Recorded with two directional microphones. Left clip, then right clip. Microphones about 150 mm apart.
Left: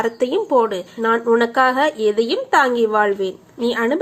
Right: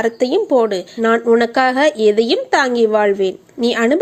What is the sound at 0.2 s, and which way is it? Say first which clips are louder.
A woman's voice: right 2 dB; 30° right (ahead or behind).